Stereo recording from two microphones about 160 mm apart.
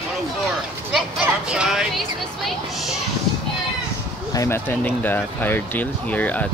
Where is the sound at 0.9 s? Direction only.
5° right (ahead or behind).